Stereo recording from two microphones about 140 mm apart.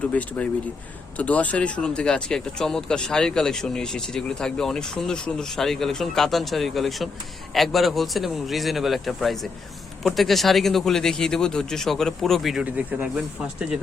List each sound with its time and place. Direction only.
0.1 s speech: 10° left (ahead or behind); by 13.7 s 5° right (ahead or behind)